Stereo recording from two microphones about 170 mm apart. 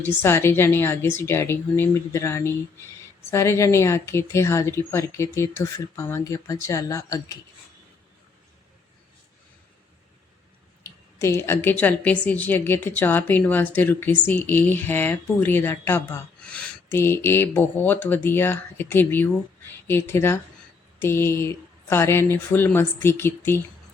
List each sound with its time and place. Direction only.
0.0 s speech: 15° left (ahead or behind)
11.2 s speech: 15° left (ahead or behind)